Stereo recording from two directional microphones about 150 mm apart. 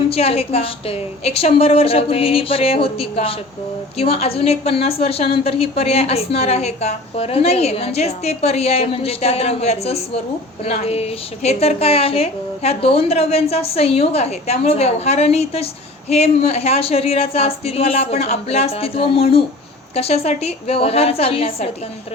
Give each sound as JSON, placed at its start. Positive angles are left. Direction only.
{"t": 0.1, "sound": "a woman's voice", "side_deg": 40}